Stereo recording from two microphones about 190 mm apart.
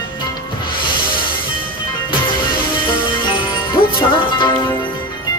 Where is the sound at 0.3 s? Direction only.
25° left (ahead or behind).